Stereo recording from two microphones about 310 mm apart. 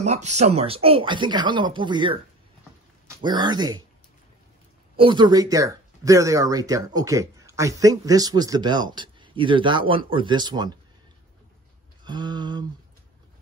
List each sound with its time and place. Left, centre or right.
0.0 s speech: right
4.9 s speech: centre
12.0 s speech: centre